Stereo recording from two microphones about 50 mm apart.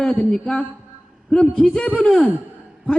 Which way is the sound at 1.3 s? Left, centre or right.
Centre.